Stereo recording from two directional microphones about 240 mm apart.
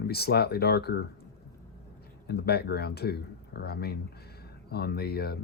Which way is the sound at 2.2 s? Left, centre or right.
Left.